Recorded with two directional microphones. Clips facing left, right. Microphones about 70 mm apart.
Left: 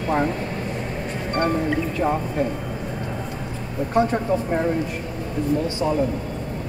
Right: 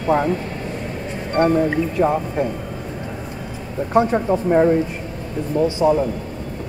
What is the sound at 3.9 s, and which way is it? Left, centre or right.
Speech, right.